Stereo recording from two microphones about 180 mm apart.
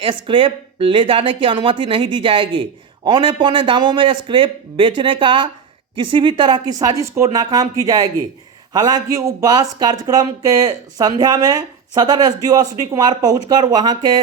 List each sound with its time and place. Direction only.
0.0 s speech: 30° right (ahead or behind)